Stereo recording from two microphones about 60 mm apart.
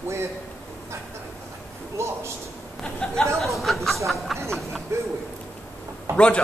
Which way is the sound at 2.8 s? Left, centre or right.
Centre.